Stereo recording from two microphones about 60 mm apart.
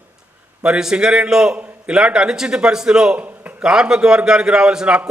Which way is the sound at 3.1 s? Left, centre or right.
Right.